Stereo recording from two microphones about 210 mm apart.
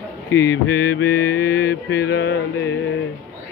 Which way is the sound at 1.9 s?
50° left (ahead or behind).